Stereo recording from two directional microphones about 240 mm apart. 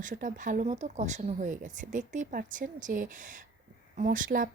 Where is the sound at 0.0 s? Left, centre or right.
Right.